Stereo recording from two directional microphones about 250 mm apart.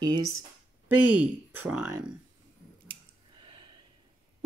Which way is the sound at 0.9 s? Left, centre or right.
Centre.